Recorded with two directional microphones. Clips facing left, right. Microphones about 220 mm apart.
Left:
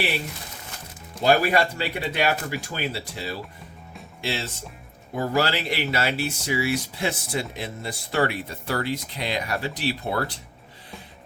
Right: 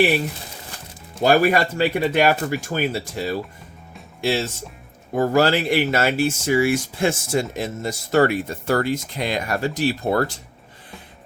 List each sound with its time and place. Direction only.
1.2 s speech: 50° right (ahead or behind)